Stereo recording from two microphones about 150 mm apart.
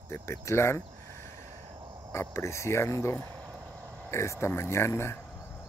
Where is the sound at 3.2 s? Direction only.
20° right (ahead or behind).